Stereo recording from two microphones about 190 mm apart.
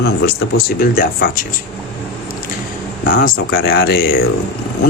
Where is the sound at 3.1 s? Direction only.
50° left (ahead or behind).